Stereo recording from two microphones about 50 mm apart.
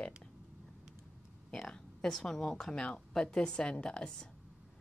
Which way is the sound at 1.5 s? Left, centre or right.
Centre.